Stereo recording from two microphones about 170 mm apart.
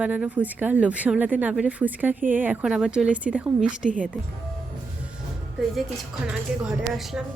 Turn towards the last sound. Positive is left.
turn(degrees=-5)  # may be behind; listen again after turning